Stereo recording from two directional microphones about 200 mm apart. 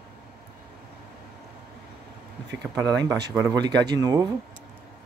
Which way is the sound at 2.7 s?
20° right (ahead or behind).